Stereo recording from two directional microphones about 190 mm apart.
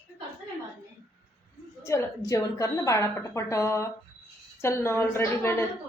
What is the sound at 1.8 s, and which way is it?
A woman's voice, 15° left (ahead or behind).